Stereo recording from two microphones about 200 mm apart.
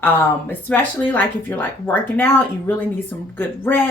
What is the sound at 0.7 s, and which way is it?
Speech, 10° left (ahead or behind).